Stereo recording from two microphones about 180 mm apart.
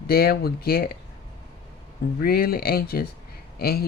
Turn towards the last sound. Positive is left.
turn(degrees=60)  # may be behind; listen again after turning